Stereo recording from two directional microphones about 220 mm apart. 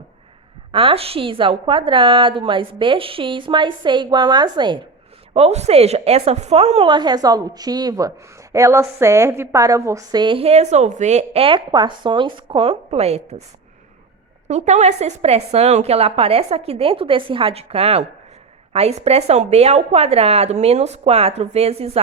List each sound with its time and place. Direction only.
0.7 s a woman's voice: 25° right (ahead or behind)
14.4 s a woman's voice: 30° right (ahead or behind)